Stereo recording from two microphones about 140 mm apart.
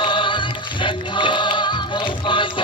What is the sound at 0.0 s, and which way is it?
Music, 35° left (ahead or behind).